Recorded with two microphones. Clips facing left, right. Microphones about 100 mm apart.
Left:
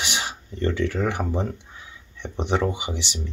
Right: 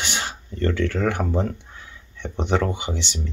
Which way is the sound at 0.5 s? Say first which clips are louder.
Right 1 dB; 25° left (ahead or behind).